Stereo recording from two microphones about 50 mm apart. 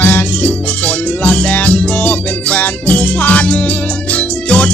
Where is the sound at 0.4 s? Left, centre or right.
Left.